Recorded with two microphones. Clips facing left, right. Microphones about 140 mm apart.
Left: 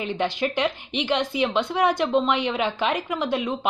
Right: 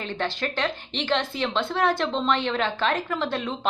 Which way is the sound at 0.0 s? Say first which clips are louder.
Left 4 dB; 15° left (ahead or behind).